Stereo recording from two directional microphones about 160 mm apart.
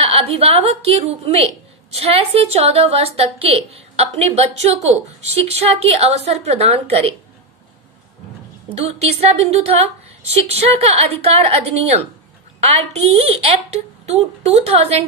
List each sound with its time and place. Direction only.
0.0 s a woman's voice: 40° right (ahead or behind)
8.8 s a woman's voice: 40° right (ahead or behind)